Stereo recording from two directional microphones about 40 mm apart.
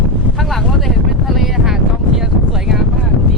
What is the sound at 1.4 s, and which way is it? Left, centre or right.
Wind noise, centre.